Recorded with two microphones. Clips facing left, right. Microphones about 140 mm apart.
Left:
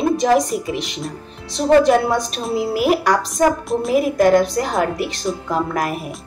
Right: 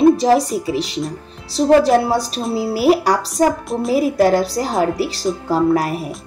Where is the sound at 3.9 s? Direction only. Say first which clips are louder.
Even; 35° right (ahead or behind).